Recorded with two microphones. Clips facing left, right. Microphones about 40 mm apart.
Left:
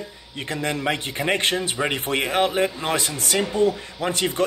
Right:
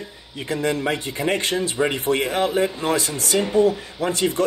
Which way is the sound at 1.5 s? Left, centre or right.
Left.